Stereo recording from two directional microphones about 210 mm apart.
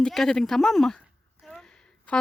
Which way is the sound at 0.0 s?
Centre (ahead or behind).